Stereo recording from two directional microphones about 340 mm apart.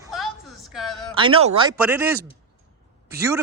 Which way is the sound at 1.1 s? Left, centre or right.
Centre.